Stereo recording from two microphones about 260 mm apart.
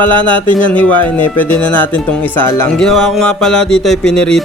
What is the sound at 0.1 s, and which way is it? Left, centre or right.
Speech, centre.